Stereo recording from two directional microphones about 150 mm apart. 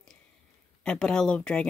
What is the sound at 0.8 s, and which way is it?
Speech, 5° left (ahead or behind).